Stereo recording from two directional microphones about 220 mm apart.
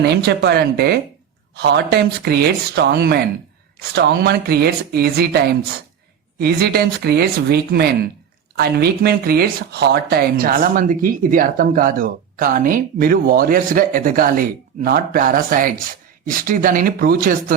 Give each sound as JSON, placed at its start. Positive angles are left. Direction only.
{"t": 0.0, "sound": "speech", "side_deg": -50}